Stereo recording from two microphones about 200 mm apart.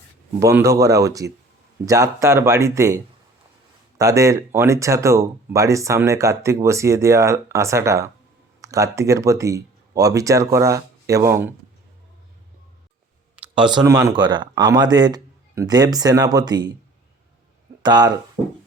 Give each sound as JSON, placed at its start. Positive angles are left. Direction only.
{"t": 0.3, "sound": "speech", "side_deg": -15}
{"t": 13.3, "sound": "a sound", "side_deg": -5}
{"t": 13.7, "sound": "speech", "side_deg": -20}
{"t": 17.8, "sound": "speech", "side_deg": -20}